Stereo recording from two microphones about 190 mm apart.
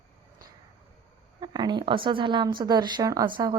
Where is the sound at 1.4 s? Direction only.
20° right (ahead or behind).